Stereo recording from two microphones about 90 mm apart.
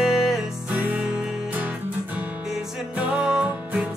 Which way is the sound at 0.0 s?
5° right (ahead or behind).